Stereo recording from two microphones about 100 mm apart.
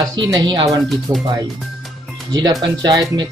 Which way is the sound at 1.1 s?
30° right (ahead or behind).